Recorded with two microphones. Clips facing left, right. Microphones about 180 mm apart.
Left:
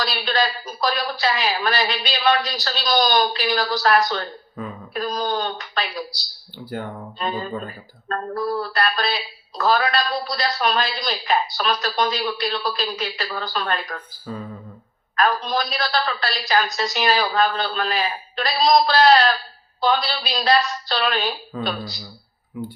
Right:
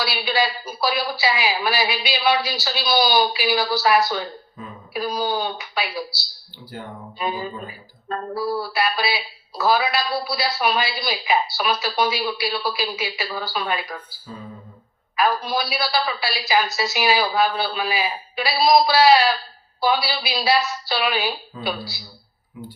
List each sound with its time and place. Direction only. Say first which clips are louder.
0.0 s speech: even; 10° right (ahead or behind)
7.2 s speech: even; 10° right (ahead or behind)
14.3 s speech: left 6 dB; 55° left (ahead or behind)
15.1 s speech: even; 10° right (ahead or behind)